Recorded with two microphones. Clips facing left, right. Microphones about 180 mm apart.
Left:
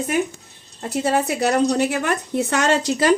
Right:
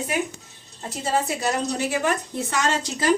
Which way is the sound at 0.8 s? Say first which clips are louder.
Left 5 dB; 70° left (ahead or behind).